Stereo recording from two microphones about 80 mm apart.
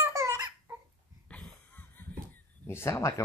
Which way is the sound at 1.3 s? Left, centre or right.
Centre.